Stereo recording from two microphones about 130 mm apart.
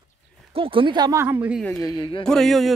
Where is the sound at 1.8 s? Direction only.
30° left (ahead or behind).